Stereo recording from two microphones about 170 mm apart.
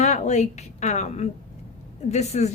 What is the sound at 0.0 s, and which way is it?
A woman's voice, 40° left (ahead or behind).